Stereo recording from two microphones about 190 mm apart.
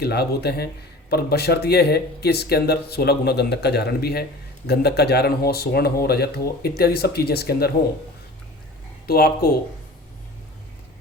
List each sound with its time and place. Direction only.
0.0 s speech: 55° left (ahead or behind)
9.0 s speech: 55° left (ahead or behind)